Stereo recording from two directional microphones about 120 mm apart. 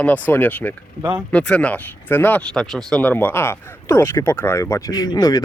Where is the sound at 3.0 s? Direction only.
15° left (ahead or behind).